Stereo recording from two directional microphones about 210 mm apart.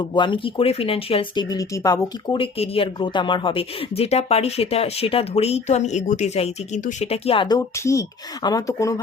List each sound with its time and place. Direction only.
0.1 s speech: 25° left (ahead or behind)